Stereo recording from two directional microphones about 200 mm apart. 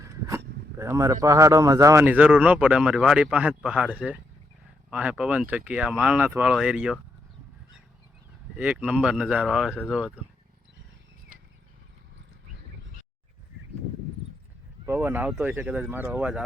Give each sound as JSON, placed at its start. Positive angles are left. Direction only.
{"t": 0.0, "sound": "a man's voice", "side_deg": -15}
{"t": 8.5, "sound": "speech", "side_deg": -5}
{"t": 9.7, "sound": "speech", "side_deg": 5}
{"t": 11.3, "sound": "a sound", "side_deg": -45}
{"t": 14.8, "sound": "a man's voice", "side_deg": -10}